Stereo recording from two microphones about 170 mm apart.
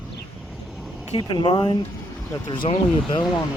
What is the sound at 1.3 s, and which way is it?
Speech, 30° left (ahead or behind).